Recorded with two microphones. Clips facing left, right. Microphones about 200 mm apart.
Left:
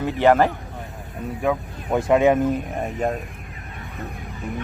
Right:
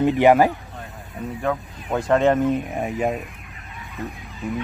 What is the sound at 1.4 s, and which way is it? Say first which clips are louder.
Speech: left 3 dB; 10° left (ahead or behind).